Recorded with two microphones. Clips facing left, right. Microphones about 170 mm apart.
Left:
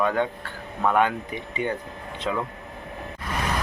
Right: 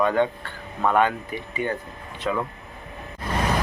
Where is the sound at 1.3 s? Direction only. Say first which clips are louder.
Even; 20° left (ahead or behind).